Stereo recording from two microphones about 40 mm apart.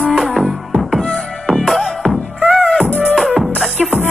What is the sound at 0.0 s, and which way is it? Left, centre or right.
Music, centre.